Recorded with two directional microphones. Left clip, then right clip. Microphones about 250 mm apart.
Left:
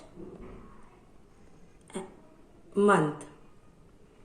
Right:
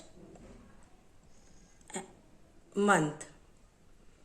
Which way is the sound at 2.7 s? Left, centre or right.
Right.